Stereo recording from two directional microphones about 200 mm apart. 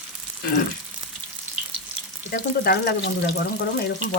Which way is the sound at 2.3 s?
50° left (ahead or behind).